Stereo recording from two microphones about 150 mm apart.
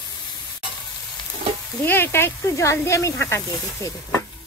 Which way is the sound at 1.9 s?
15° left (ahead or behind).